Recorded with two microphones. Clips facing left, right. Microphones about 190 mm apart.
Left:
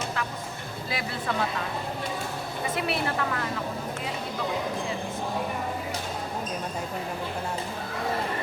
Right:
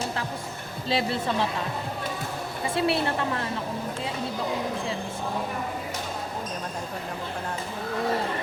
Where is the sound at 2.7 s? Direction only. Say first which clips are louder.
Right 5 dB; 30° right (ahead or behind).